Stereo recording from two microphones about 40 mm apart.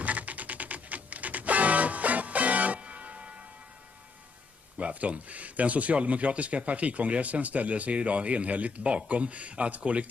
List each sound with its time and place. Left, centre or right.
0.0 s music: right
4.7 s speech: right